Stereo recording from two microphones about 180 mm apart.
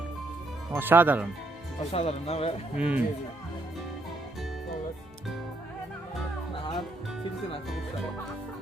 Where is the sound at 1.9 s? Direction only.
35° left (ahead or behind).